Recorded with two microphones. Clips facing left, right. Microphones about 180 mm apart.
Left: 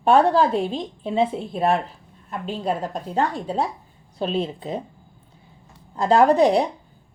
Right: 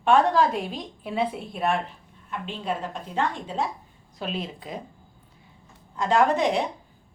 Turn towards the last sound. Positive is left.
turn(degrees=35)  # may be behind; listen again after turning